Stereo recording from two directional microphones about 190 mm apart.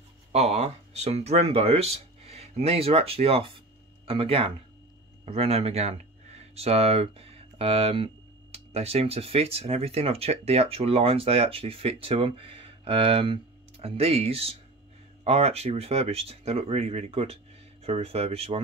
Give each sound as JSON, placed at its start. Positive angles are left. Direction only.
{"t": 0.3, "sound": "speech", "side_deg": -35}